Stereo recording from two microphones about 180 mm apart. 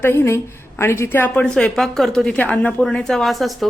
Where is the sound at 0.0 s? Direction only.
15° left (ahead or behind).